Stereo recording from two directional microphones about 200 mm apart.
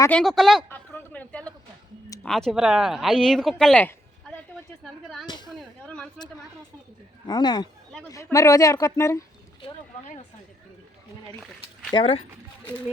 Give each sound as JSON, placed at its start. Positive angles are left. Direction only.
{"t": 0.0, "sound": "speech", "side_deg": 5}
{"t": 0.7, "sound": "a sound", "side_deg": 10}
{"t": 2.2, "sound": "speech", "side_deg": 5}
{"t": 5.5, "sound": "speech", "side_deg": 5}
{"t": 7.3, "sound": "speech", "side_deg": 20}
{"t": 11.9, "sound": "speech", "side_deg": 30}